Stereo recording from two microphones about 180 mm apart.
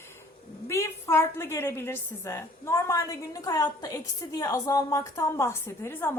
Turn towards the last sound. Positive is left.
turn(degrees=10)  # may be behind; listen again after turning